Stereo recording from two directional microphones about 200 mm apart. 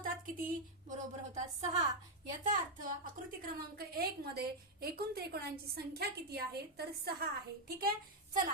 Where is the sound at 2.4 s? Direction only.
45° right (ahead or behind).